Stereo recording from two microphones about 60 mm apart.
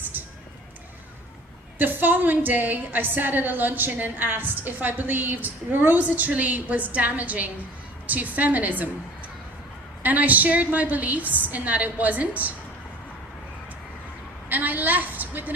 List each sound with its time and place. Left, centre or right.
0.1 s a sound: right
1.8 s a woman's voice: right
10.0 s a woman's voice: right
14.5 s a woman's voice: right